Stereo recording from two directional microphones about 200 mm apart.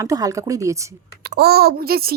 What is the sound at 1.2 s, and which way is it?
Speech, 50° right (ahead or behind).